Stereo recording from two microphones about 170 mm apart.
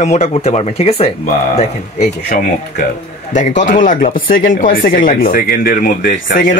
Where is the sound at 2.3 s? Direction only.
50° left (ahead or behind).